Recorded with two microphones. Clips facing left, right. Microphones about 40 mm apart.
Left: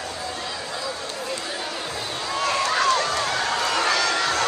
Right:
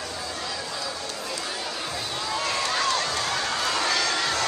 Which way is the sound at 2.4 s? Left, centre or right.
Left.